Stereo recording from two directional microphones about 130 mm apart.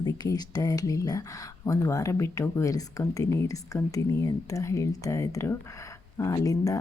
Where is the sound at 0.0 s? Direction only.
30° left (ahead or behind).